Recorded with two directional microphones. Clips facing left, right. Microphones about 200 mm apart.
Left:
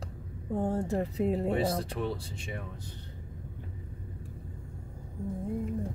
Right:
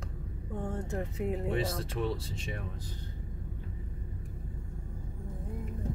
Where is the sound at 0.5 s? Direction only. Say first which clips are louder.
Left 6 dB; 35° left (ahead or behind).